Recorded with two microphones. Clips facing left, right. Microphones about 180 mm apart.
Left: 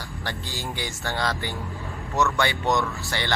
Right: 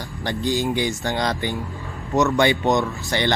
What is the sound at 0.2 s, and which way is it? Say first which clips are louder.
Speech: right 12 dB; 15° right (ahead or behind).